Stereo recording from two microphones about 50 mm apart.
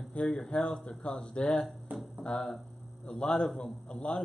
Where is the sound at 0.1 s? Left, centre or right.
Left.